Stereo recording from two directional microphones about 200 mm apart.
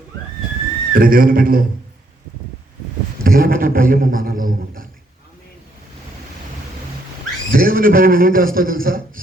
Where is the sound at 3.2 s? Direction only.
45° right (ahead or behind).